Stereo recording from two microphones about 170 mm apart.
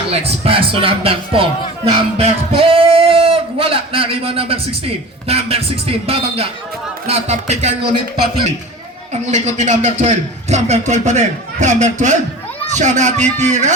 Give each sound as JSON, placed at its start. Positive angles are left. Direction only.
{"t": 0.1, "sound": "speech", "side_deg": -35}
{"t": 9.2, "sound": "a man's voice", "side_deg": -45}